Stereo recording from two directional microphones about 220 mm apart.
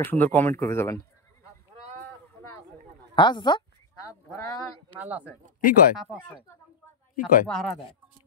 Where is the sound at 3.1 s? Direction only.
20° left (ahead or behind).